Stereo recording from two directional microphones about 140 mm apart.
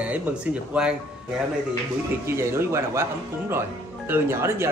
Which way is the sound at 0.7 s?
5° right (ahead or behind).